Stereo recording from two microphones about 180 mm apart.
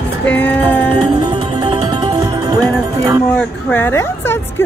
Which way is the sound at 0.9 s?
25° right (ahead or behind).